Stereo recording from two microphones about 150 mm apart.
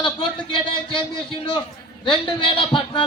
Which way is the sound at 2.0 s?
35° left (ahead or behind).